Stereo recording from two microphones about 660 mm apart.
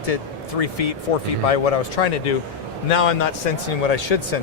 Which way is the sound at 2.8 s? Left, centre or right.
Left.